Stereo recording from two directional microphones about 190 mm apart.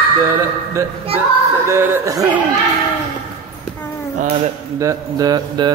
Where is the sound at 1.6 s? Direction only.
15° right (ahead or behind).